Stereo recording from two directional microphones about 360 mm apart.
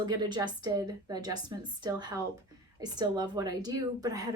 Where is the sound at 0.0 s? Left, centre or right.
Centre.